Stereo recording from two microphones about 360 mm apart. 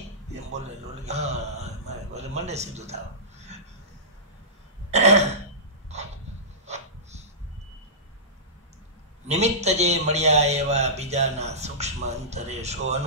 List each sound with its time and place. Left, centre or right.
0.3 s a man's voice: centre
4.9 s throat clearing: centre
6.6 s a sound: centre
9.3 s a man's voice: centre